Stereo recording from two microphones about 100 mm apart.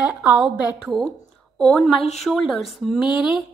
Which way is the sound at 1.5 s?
5° left (ahead or behind).